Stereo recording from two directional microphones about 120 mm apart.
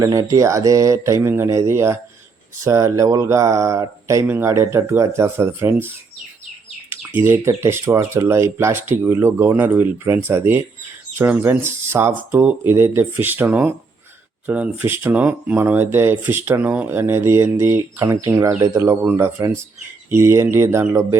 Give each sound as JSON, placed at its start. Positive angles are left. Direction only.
{"t": 0.0, "sound": "speech", "side_deg": -30}
{"t": 6.9, "sound": "speech", "side_deg": -20}